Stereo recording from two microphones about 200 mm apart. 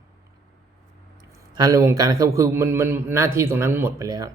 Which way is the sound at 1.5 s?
15° right (ahead or behind).